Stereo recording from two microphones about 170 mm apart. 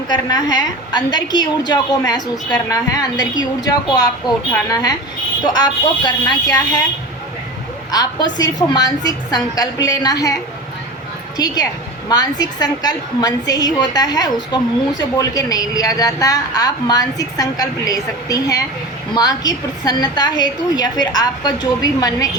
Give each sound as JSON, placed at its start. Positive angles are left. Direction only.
{"t": 0.1, "sound": "a woman's voice", "side_deg": 25}
{"t": 7.9, "sound": "a woman's voice", "side_deg": 25}
{"t": 11.3, "sound": "a woman's voice", "side_deg": 25}